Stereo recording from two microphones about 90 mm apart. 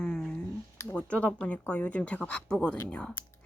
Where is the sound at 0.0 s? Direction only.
10° left (ahead or behind).